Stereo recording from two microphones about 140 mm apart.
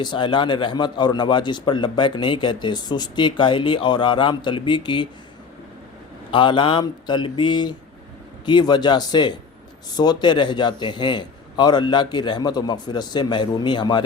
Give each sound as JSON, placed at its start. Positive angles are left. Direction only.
{"t": 0.0, "sound": "a man's voice", "side_deg": 35}
{"t": 6.3, "sound": "a man's voice", "side_deg": 35}